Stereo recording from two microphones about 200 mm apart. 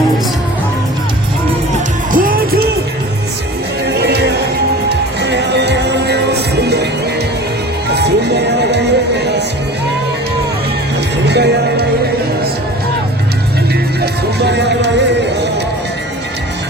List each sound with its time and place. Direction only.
2.1 s music: 45° right (ahead or behind)
3.8 s music: 55° right (ahead or behind)
7.9 s music: 55° right (ahead or behind)
11.3 s music: 55° right (ahead or behind)
14.0 s music: 55° right (ahead or behind)